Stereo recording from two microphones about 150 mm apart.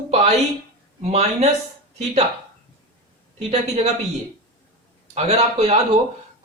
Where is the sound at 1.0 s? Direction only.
45° right (ahead or behind).